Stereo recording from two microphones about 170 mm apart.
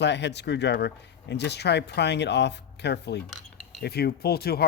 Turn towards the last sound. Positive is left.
turn(degrees=65)  # may be behind; listen again after turning